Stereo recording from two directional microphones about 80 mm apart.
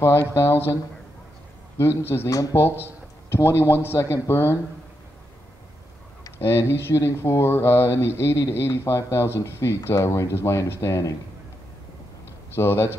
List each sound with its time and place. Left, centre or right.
0.0 s speech: left
2.1 s speech: left
2.5 s speech: left
6.3 s speech: left
12.5 s speech: left